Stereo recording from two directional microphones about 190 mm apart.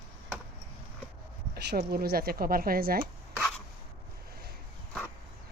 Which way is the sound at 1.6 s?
60° right (ahead or behind).